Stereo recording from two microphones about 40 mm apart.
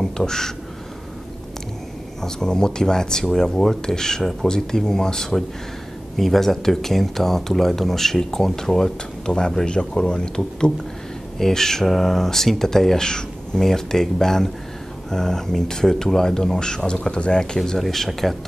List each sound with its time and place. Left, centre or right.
0.0 s a sound: centre
2.2 s speech: centre
4.2 s speech: centre
4.5 s speech: centre
9.2 s speech: left